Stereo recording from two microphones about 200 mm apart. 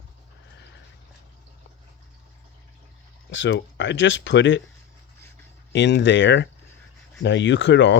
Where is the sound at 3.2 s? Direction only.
65° left (ahead or behind).